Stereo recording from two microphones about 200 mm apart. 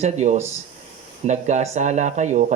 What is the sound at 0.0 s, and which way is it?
Speech, 35° right (ahead or behind).